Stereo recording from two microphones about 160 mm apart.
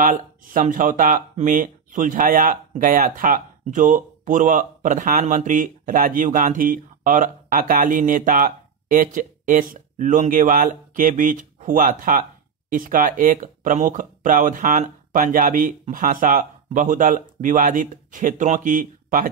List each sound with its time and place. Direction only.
0.0 s speech: 55° right (ahead or behind)